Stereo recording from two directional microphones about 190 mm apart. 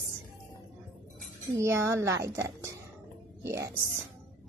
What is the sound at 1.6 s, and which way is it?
A woman's voice, 15° right (ahead or behind).